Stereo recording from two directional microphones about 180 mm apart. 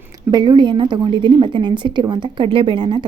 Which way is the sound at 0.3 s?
25° right (ahead or behind).